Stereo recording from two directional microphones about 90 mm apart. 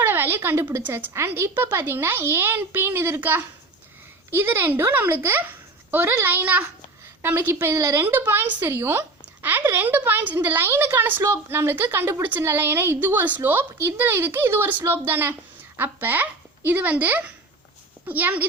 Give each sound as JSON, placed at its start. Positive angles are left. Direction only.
{"t": 0.0, "sound": "a woman's voice", "side_deg": -25}